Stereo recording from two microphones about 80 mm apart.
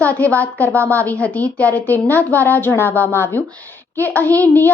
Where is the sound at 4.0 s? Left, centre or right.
Left.